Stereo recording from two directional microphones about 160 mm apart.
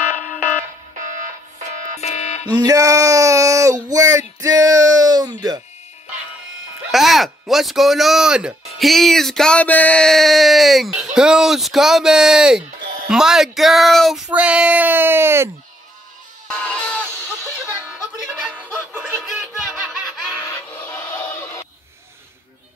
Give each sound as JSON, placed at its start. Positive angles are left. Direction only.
{"t": 2.0, "sound": "a sound", "side_deg": 45}
{"t": 2.4, "sound": "child singing", "side_deg": -25}
{"t": 6.9, "sound": "speech", "side_deg": 0}
{"t": 13.1, "sound": "child singing", "side_deg": -5}
{"t": 16.4, "sound": "goat", "side_deg": 5}
{"t": 17.7, "sound": "a sound", "side_deg": -5}
{"t": 18.4, "sound": "music", "side_deg": -10}
{"t": 20.3, "sound": "music", "side_deg": 20}